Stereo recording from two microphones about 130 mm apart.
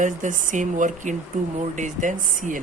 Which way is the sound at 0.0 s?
75° right (ahead or behind).